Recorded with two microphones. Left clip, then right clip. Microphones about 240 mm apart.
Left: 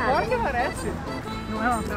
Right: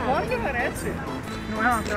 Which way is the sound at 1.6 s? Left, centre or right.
Left.